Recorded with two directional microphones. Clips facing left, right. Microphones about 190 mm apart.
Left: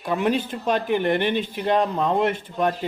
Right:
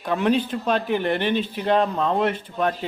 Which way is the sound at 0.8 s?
55° left (ahead or behind).